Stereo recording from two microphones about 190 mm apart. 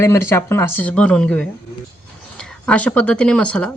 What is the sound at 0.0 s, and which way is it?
Speech, 15° left (ahead or behind).